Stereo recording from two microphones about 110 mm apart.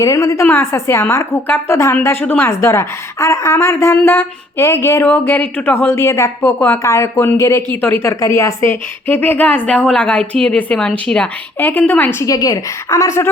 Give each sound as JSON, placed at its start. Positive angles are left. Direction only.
{"t": 0.0, "sound": "a woman's voice", "side_deg": 30}
{"t": 12.2, "sound": "a woman's voice", "side_deg": 35}